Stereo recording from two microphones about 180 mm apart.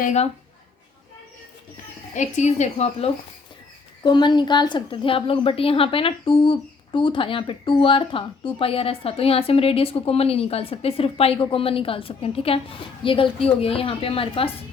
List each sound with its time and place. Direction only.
0.0 s a woman's voice: 40° left (ahead or behind)
2.1 s a woman's voice: 40° left (ahead or behind)
4.0 s a woman's voice: 25° left (ahead or behind)